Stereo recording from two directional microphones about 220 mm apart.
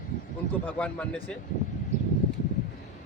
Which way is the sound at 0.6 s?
5° left (ahead or behind).